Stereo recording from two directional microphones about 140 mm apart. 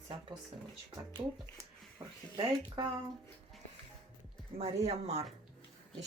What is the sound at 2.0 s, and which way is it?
Speech, 30° right (ahead or behind).